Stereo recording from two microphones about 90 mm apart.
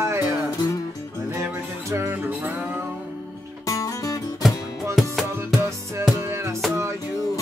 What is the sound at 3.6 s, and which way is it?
Music, 40° left (ahead or behind).